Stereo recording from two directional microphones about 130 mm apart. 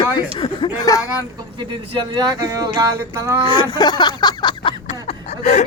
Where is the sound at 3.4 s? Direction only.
35° left (ahead or behind).